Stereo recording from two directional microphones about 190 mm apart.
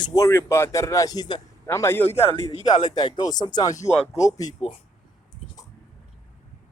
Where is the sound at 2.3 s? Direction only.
35° left (ahead or behind).